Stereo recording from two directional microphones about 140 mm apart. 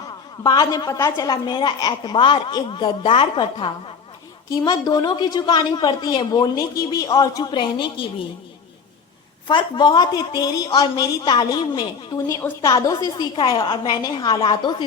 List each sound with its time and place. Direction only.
0.4 s a woman's voice: 30° left (ahead or behind)
9.5 s a woman's voice: 35° left (ahead or behind)
12.3 s a woman's voice: 20° left (ahead or behind)